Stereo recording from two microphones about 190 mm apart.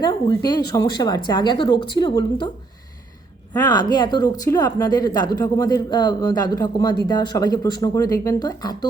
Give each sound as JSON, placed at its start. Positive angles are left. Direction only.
{"t": 0.0, "sound": "speech", "side_deg": 25}
{"t": 3.5, "sound": "speech", "side_deg": 20}